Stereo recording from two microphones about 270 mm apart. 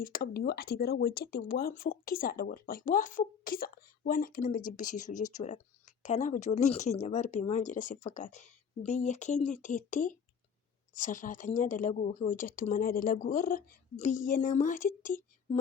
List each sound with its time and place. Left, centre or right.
0.0 s speech: left